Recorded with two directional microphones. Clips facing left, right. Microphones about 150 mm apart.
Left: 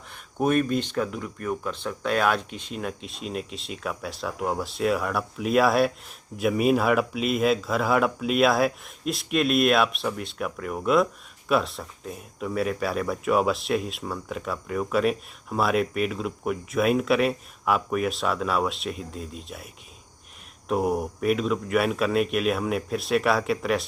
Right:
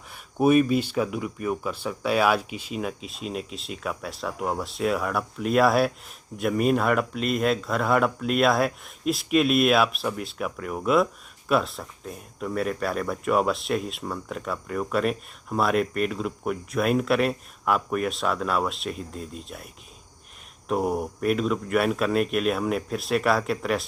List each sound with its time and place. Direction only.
0.1 s speech: 10° right (ahead or behind)